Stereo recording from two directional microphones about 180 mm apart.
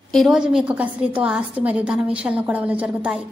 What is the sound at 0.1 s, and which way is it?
A woman's voice, centre (ahead or behind).